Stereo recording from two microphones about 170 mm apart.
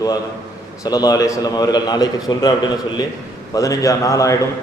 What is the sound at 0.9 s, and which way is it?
A man's voice, 25° left (ahead or behind).